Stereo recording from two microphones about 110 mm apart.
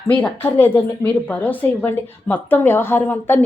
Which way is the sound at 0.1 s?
15° left (ahead or behind).